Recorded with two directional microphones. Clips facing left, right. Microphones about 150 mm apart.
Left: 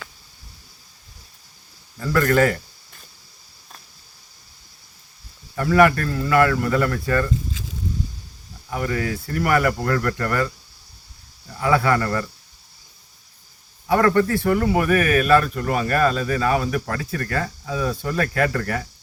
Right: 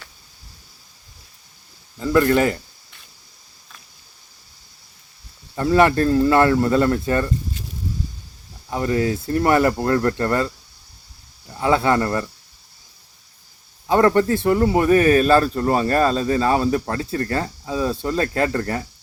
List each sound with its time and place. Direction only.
2.0 s speech: 20° right (ahead or behind)
5.5 s speech: 25° right (ahead or behind)
8.7 s speech: 25° right (ahead or behind)
11.6 s speech: 25° right (ahead or behind)
13.8 s speech: 25° right (ahead or behind)